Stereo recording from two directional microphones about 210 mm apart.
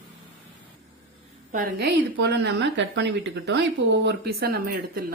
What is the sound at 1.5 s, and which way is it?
A woman's voice, 45° right (ahead or behind).